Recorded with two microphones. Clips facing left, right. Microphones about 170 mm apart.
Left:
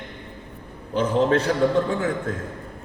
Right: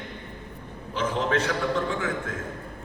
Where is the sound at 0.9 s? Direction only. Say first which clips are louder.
Left 6 dB; 35° left (ahead or behind).